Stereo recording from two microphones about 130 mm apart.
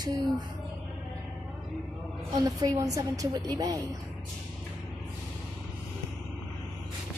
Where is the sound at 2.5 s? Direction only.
30° right (ahead or behind).